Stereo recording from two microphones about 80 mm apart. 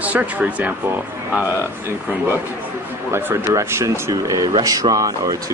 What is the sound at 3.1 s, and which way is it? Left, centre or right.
Speech, right.